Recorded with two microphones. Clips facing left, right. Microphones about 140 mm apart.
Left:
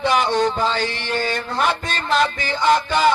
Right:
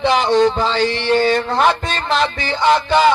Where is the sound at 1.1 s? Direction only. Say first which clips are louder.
Right 9 dB; 45° right (ahead or behind).